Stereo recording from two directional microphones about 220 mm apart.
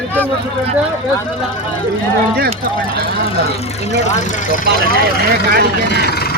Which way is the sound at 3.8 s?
30° left (ahead or behind).